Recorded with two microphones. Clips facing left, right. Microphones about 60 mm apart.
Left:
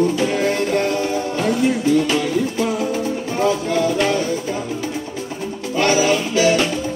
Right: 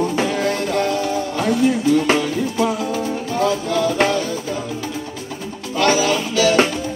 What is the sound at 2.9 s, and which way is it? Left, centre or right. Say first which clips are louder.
Music: even; left.